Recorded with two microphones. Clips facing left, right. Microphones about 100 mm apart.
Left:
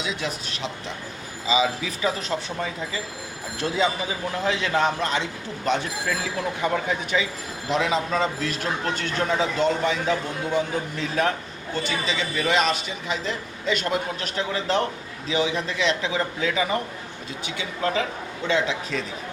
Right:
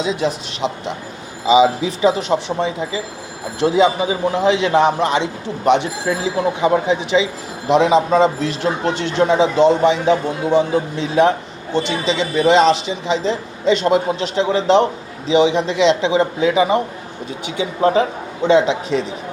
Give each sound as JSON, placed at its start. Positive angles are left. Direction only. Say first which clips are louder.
{"t": 0.0, "sound": "a man's voice", "louder": "right 10 dB", "side_deg": -30}